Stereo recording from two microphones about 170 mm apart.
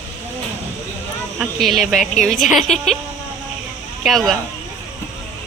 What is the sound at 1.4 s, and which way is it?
A woman's voice, centre (ahead or behind).